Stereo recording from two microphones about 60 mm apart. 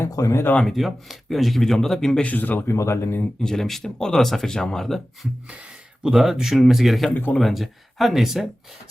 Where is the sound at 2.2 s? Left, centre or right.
Left.